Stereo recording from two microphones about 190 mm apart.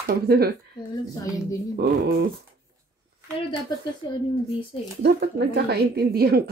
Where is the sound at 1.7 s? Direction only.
55° right (ahead or behind).